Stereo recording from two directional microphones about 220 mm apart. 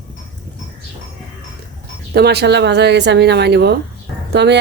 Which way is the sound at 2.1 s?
50° right (ahead or behind).